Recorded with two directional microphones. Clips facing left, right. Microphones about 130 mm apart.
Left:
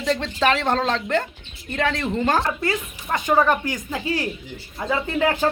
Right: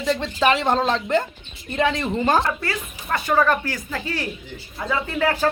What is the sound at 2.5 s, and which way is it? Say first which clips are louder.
Speech: left 2 dB; 20° left (ahead or behind).